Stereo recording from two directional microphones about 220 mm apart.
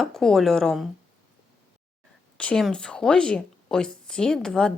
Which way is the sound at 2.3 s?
5° left (ahead or behind).